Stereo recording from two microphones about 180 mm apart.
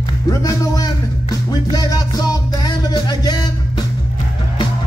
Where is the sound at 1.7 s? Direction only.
20° left (ahead or behind).